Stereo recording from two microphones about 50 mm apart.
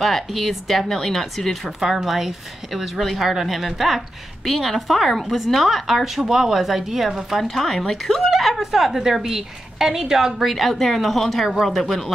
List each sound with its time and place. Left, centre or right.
0.0 s a woman's voice: centre